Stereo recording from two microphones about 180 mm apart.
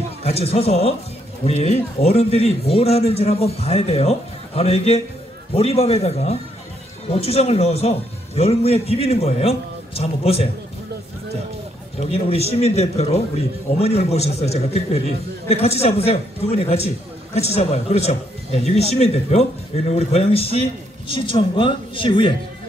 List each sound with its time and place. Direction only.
0.2 s a man's voice: 35° left (ahead or behind)
12.0 s a man's voice: 35° left (ahead or behind)